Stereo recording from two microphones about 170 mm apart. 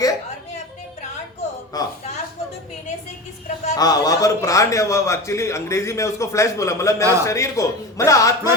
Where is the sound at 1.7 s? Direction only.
20° left (ahead or behind).